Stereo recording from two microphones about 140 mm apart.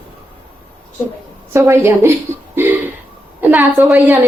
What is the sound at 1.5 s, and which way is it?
Speech, 20° right (ahead or behind).